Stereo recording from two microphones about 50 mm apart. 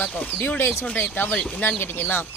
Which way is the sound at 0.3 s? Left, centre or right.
Left.